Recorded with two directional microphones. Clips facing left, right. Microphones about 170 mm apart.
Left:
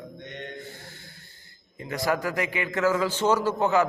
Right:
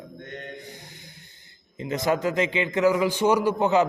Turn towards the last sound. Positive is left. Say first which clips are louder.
# right 2 dB
turn(degrees=-20)  # may be behind; listen again after turning